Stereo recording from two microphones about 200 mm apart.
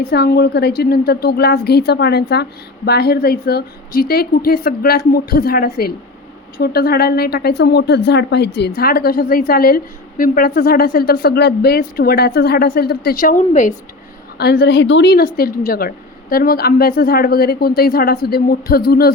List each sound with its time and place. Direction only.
0.0 s a woman's voice: 55° left (ahead or behind)
14.3 s a woman's voice: 55° left (ahead or behind)